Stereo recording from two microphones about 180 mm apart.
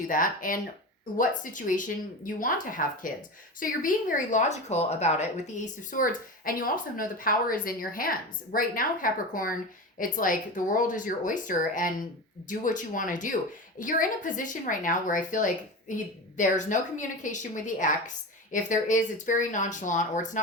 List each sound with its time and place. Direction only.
0.1 s a woman's voice: 50° left (ahead or behind)